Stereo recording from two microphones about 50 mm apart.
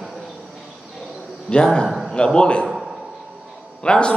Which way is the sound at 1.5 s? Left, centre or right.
Centre.